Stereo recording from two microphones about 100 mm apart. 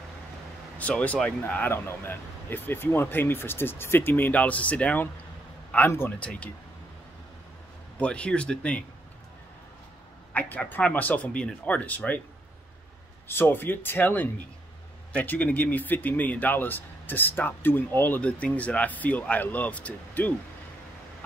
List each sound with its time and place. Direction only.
0.7 s speech: 15° left (ahead or behind)
6.1 s speech: 10° left (ahead or behind)
8.0 s speech: 10° left (ahead or behind)
10.3 s speech: 15° left (ahead or behind)
13.3 s speech: 20° left (ahead or behind)